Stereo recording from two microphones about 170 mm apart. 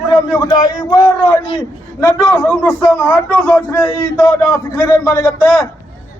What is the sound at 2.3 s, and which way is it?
A man's voice, 5° left (ahead or behind).